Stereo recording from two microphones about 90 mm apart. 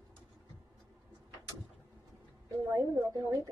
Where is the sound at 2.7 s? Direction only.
40° right (ahead or behind).